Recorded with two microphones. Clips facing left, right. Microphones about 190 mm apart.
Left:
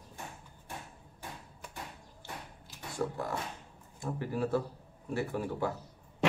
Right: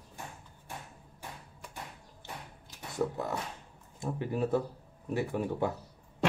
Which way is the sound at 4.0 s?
20° right (ahead or behind).